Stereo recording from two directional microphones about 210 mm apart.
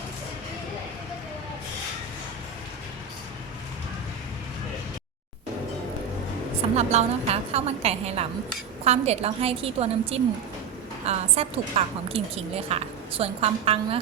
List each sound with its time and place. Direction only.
6.7 s a woman's voice: 30° right (ahead or behind)